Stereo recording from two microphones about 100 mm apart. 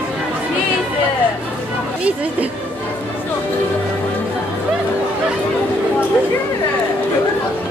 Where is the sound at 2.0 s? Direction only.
15° right (ahead or behind).